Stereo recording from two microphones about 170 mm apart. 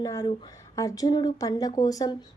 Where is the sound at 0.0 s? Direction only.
20° left (ahead or behind).